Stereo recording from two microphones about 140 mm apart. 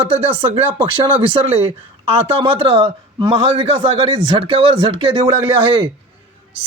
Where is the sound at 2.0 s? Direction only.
45° right (ahead or behind).